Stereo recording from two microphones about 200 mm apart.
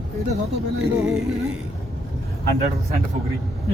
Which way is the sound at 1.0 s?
Centre (ahead or behind).